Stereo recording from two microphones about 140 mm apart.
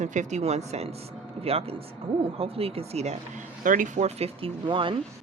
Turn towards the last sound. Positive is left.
turn(degrees=-35)  # may be behind; listen again after turning